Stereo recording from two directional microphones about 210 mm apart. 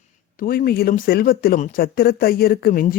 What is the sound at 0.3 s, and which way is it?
A man's voice, 45° left (ahead or behind).